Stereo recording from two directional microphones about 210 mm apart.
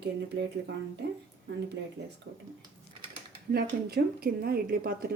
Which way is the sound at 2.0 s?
50° right (ahead or behind).